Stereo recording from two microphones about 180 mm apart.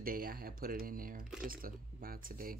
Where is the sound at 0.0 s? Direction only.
55° right (ahead or behind).